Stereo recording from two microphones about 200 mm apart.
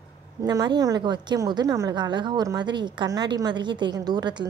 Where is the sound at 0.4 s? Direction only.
20° right (ahead or behind).